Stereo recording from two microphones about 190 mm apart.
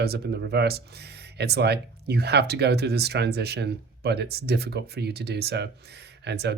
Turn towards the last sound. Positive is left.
turn(degrees=-60)  # may be behind; listen again after turning